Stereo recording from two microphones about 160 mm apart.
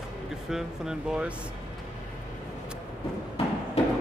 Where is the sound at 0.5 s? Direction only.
5° right (ahead or behind).